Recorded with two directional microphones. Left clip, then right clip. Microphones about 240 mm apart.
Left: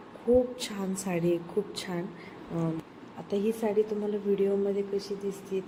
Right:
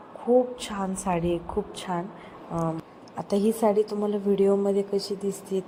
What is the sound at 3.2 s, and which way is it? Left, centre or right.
Speech, right.